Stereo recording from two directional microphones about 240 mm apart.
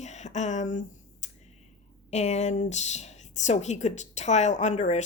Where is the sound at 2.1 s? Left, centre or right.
Left.